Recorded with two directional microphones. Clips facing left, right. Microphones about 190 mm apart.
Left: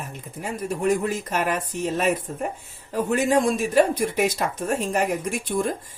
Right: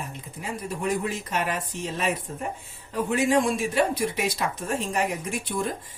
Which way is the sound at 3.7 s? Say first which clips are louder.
Left 8 dB; 45° left (ahead or behind).